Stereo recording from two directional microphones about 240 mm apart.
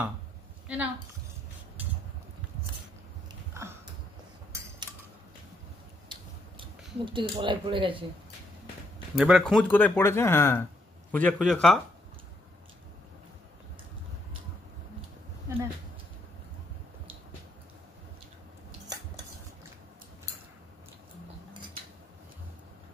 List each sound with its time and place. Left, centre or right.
0.7 s a man's voice: centre
7.1 s speech: right
9.1 s a man's voice: centre
15.4 s a sound: centre